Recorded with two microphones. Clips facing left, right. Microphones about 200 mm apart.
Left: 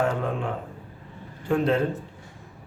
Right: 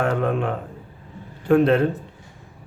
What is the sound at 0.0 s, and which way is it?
Speech, 65° right (ahead or behind).